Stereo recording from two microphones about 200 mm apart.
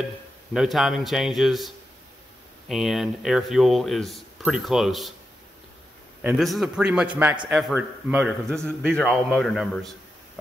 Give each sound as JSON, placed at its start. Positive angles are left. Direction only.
{"t": 0.5, "sound": "a man's voice", "side_deg": 0}
{"t": 2.7, "sound": "a man's voice", "side_deg": 0}
{"t": 6.2, "sound": "a man's voice", "side_deg": 0}